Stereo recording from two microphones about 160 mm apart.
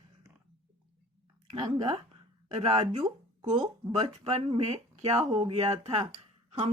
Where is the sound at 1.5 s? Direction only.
40° right (ahead or behind).